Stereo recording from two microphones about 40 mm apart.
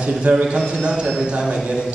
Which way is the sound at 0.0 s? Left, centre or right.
Right.